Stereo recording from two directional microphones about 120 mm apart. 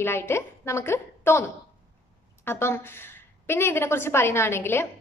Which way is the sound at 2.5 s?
20° left (ahead or behind).